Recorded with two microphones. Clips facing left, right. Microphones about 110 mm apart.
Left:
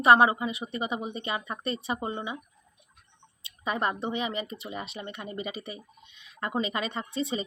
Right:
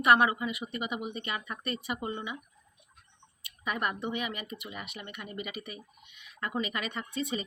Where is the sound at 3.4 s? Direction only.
25° left (ahead or behind).